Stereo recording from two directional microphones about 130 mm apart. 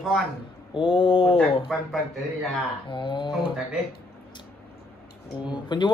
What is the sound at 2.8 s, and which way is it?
Speech, 40° left (ahead or behind).